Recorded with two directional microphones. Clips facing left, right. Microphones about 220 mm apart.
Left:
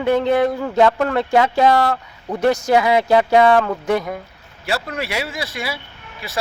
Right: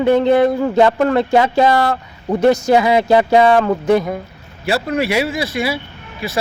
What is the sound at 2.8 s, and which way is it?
Speech, 10° right (ahead or behind).